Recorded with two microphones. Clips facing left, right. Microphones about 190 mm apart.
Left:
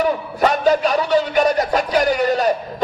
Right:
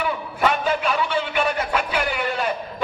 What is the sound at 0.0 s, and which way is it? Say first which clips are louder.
Music: left 5 dB; 40° left (ahead or behind).